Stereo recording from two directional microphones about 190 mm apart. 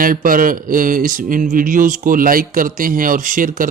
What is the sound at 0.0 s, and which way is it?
Mantra, 50° right (ahead or behind).